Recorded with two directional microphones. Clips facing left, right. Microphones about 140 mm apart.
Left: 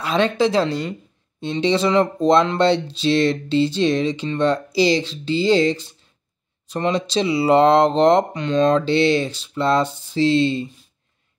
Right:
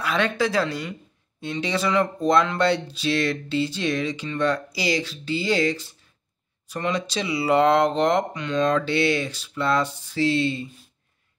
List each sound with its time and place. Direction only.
0.0 s speech: 25° left (ahead or behind)